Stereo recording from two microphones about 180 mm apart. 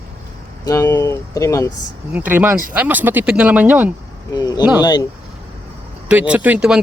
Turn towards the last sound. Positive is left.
turn(degrees=-5)  # may be behind; listen again after turning